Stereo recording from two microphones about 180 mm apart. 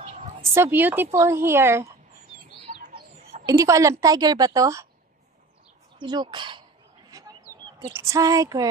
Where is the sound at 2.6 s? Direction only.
40° right (ahead or behind).